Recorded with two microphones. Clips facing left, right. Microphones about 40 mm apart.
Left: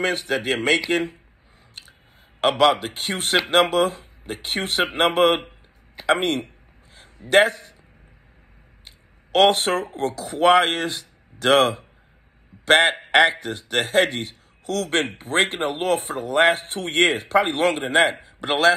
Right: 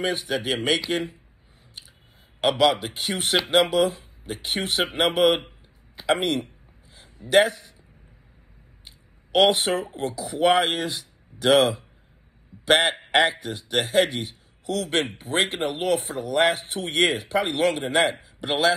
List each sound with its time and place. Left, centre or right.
0.1 s speech: left
2.7 s speech: left
9.3 s speech: left
12.9 s a sound: left
13.3 s speech: left